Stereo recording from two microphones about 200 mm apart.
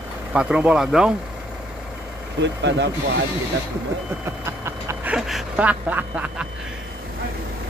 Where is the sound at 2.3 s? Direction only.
60° right (ahead or behind).